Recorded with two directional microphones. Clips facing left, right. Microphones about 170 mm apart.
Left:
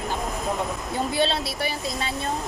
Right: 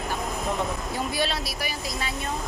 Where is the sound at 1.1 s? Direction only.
25° left (ahead or behind).